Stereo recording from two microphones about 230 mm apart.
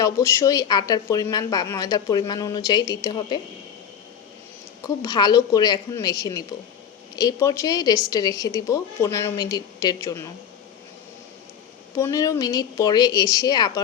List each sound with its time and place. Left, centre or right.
0.0 s speech: centre
5.0 s speech: centre
11.9 s speech: centre